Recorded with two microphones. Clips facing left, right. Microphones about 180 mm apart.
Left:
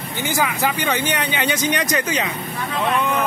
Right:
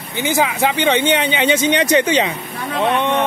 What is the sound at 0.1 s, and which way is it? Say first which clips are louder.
Speech: right 4 dB; 20° right (ahead or behind).